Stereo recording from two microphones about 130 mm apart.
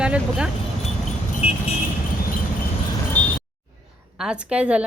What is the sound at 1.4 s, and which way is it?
Vehicle, 45° left (ahead or behind).